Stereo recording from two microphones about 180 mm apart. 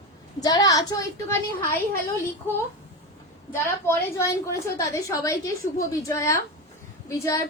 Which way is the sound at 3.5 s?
15° left (ahead or behind).